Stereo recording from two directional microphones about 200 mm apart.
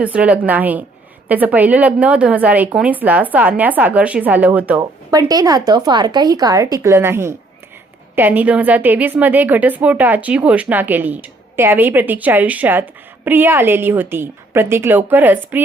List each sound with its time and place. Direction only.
0.0 s a woman's voice: 5° right (ahead or behind)
4.8 s a woman's voice: 20° right (ahead or behind)